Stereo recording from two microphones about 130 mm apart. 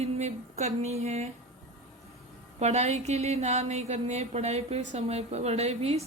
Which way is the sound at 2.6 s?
60° right (ahead or behind).